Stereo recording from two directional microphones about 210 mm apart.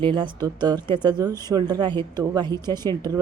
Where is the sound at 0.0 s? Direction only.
20° right (ahead or behind).